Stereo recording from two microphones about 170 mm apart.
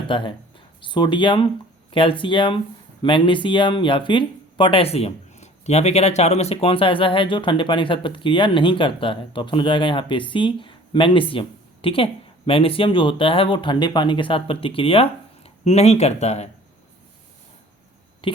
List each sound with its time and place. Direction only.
0.1 s speech: 30° left (ahead or behind)